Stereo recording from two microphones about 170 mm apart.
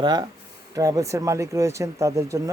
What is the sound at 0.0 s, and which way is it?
Speech, 25° right (ahead or behind).